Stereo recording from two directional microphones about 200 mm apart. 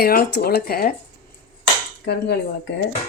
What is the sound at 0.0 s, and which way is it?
Speech, 50° left (ahead or behind).